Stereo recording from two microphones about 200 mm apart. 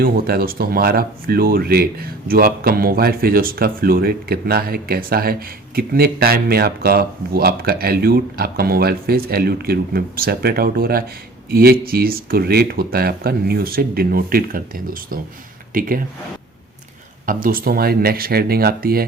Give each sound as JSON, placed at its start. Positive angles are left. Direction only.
{"t": 0.0, "sound": "speech", "side_deg": -45}
{"t": 17.2, "sound": "speech", "side_deg": -45}